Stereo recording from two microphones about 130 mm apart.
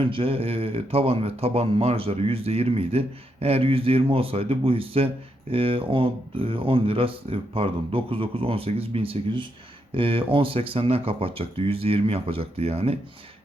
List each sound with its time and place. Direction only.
0.0 s speech: 45° right (ahead or behind)